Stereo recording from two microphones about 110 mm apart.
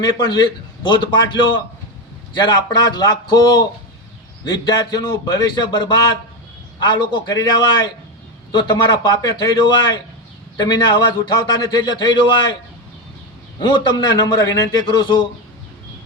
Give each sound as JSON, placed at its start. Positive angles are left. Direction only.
{"t": 0.0, "sound": "a man's voice", "side_deg": 40}
{"t": 13.6, "sound": "a man's voice", "side_deg": 40}